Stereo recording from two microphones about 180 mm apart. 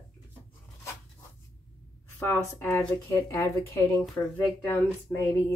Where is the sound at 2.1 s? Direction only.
10° left (ahead or behind).